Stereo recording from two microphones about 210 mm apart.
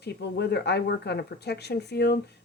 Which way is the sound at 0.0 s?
50° left (ahead or behind).